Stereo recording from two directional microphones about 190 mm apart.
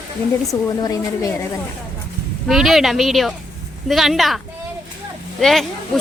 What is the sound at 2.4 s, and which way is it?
Speech, centre (ahead or behind).